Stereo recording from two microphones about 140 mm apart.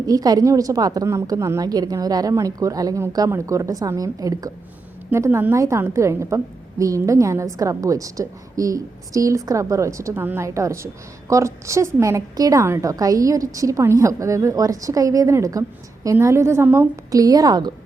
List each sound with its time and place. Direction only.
0.0 s a woman's voice: 25° right (ahead or behind)